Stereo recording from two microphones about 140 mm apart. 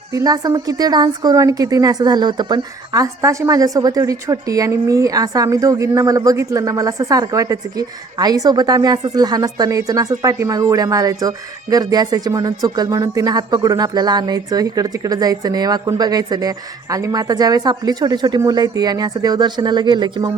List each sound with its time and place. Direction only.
0.1 s a woman's voice: 25° right (ahead or behind)